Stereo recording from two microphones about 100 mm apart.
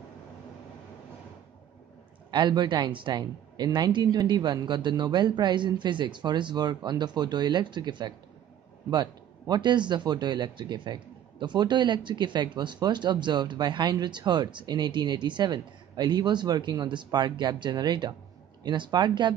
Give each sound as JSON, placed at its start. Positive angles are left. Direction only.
{"t": 2.3, "sound": "a man's voice", "side_deg": -45}